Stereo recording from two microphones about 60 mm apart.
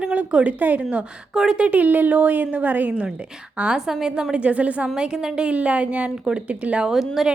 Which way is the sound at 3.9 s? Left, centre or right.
Centre.